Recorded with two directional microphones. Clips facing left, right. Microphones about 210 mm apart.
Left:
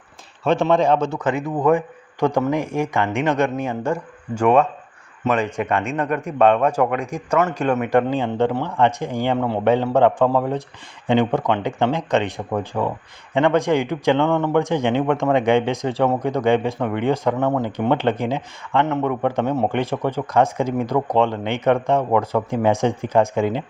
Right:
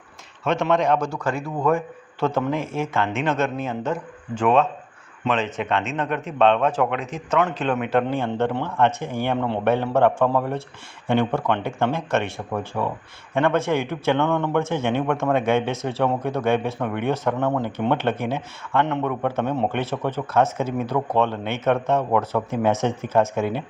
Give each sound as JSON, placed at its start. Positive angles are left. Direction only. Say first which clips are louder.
{"t": 0.4, "sound": "speech", "louder": "left 3 dB", "side_deg": 30}